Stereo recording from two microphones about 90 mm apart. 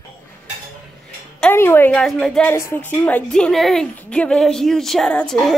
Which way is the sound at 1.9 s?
5° left (ahead or behind).